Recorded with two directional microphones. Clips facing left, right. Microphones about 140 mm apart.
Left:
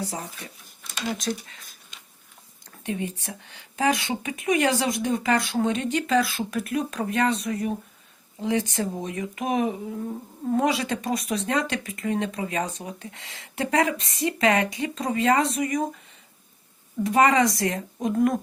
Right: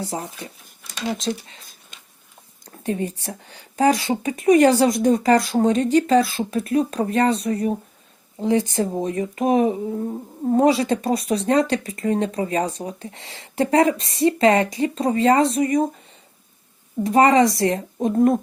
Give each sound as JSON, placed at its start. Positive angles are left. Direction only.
{"t": 0.0, "sound": "speech", "side_deg": -30}
{"t": 2.6, "sound": "speech", "side_deg": -40}
{"t": 17.0, "sound": "speech", "side_deg": -35}